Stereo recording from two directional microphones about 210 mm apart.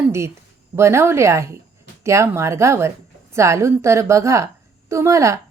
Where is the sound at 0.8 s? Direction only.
15° right (ahead or behind).